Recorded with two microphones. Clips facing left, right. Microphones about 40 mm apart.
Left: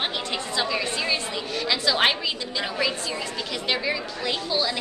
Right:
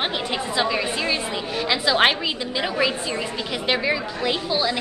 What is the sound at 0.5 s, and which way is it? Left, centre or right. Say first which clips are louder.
Speech: right 3 dB; centre.